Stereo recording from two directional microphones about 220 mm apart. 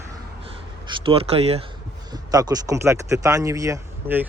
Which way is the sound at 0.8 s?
25° right (ahead or behind).